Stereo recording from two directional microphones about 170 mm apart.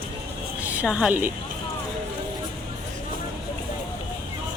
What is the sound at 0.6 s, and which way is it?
Speech, 5° right (ahead or behind).